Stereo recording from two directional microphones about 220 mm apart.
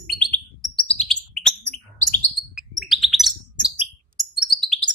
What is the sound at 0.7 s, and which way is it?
Bird, 25° left (ahead or behind).